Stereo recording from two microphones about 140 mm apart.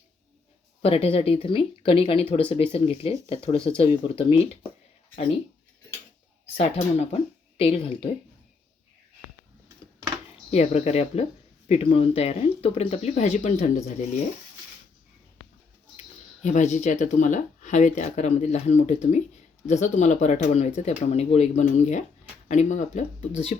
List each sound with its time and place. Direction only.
0.8 s speech: 45° left (ahead or behind)
6.6 s speech: 50° left (ahead or behind)
10.5 s speech: 50° left (ahead or behind)
16.4 s speech: 60° left (ahead or behind)